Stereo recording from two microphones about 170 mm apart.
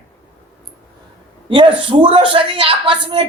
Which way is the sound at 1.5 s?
30° right (ahead or behind).